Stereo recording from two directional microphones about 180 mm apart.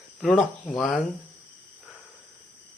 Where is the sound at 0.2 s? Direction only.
Centre (ahead or behind).